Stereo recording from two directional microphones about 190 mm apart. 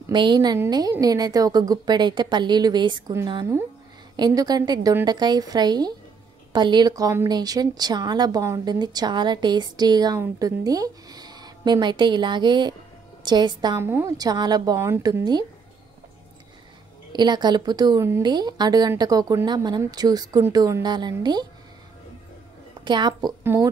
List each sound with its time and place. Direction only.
0.1 s a woman's voice: 25° right (ahead or behind)
17.1 s a woman's voice: 25° right (ahead or behind)
22.8 s a woman's voice: 25° right (ahead or behind)
23.4 s speech: 10° right (ahead or behind)